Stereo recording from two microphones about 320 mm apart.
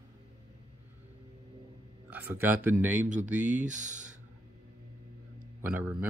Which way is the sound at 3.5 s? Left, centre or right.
Right.